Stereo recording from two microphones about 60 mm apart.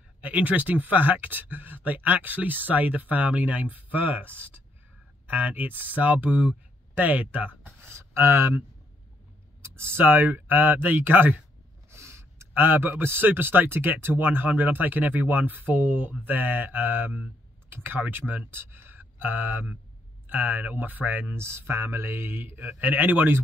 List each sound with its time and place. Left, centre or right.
0.2 s speech: right
7.8 s speech: right
9.6 s speech: right
11.9 s speech: right
21.4 s speech: right
22.6 s speech: right